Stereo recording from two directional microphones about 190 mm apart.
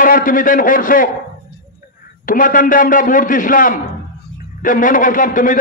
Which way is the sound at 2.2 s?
45° left (ahead or behind).